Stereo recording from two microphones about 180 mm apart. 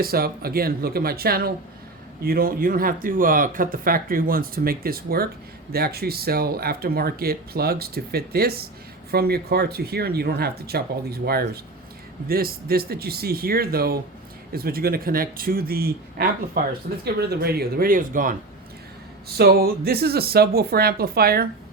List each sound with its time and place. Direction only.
0.0 s speech: 55° right (ahead or behind)
19.4 s speech: 60° right (ahead or behind)